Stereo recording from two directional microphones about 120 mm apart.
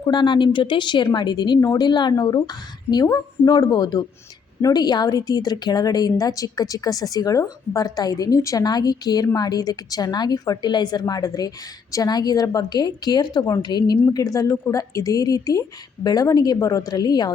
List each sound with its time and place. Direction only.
0.0 s a woman's voice: 40° left (ahead or behind)